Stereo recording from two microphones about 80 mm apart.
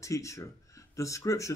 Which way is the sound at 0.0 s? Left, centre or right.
Left.